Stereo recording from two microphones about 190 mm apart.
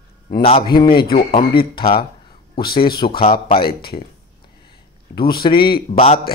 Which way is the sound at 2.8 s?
25° left (ahead or behind).